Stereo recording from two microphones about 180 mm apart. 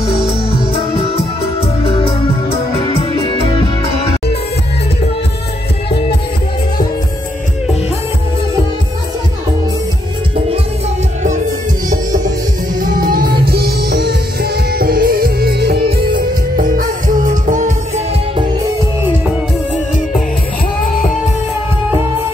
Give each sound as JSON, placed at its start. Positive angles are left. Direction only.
{"t": 0.7, "sound": "music", "side_deg": 30}
{"t": 2.5, "sound": "music", "side_deg": 30}
{"t": 13.0, "sound": "music", "side_deg": -55}